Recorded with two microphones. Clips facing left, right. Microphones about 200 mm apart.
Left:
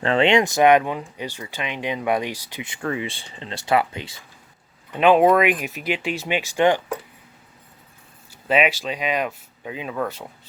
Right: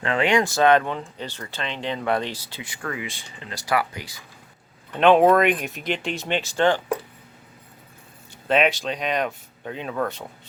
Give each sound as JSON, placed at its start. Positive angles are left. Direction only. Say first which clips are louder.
{"t": 0.0, "sound": "speech", "louder": "left 3 dB", "side_deg": 30}
{"t": 4.9, "sound": "speech", "louder": "even", "side_deg": 5}
{"t": 8.3, "sound": "speech", "louder": "even", "side_deg": 5}